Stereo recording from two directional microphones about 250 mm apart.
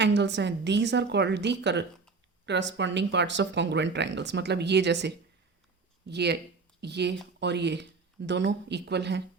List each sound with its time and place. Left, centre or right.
0.0 s speech: right